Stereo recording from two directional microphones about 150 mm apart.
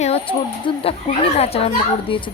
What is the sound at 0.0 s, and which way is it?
Speech, 40° left (ahead or behind).